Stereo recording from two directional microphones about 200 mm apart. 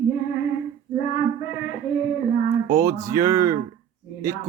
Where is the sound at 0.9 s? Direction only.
40° left (ahead or behind).